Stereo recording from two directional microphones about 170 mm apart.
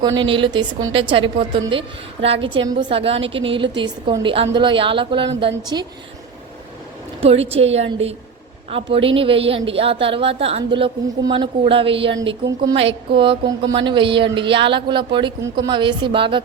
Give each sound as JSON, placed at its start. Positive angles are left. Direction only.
{"t": 0.2, "sound": "a woman's voice", "side_deg": -30}
{"t": 7.2, "sound": "a woman's voice", "side_deg": -35}
{"t": 12.2, "sound": "a woman's voice", "side_deg": -20}
{"t": 13.1, "sound": "a woman's voice", "side_deg": -30}